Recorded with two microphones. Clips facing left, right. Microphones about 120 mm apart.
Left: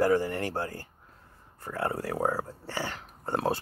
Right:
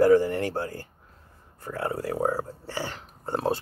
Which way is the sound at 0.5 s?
40° left (ahead or behind).